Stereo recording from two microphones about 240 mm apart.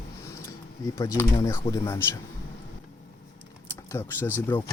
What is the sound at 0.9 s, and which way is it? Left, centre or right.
Speech, centre.